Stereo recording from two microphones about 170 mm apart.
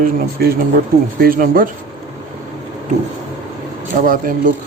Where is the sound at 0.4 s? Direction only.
65° right (ahead or behind).